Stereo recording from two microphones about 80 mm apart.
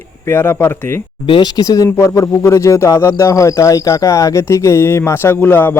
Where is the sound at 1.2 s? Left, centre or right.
Left.